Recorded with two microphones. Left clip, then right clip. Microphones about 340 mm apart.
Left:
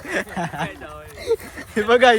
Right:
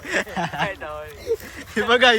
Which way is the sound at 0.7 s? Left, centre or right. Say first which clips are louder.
Right 5 dB; centre.